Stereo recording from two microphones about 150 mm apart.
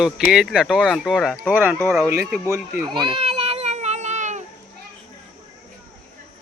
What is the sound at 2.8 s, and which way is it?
Baby cry, 30° right (ahead or behind).